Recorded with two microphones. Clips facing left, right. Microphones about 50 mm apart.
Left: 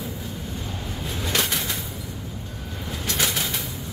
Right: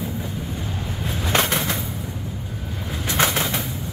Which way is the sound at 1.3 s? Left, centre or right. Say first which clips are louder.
Right 5 dB; right.